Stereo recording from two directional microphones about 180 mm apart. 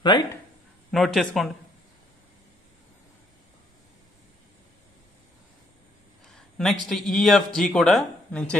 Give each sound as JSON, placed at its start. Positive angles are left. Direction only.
{"t": 0.0, "sound": "speech", "side_deg": 25}
{"t": 0.9, "sound": "speech", "side_deg": 0}
{"t": 6.3, "sound": "speech", "side_deg": 0}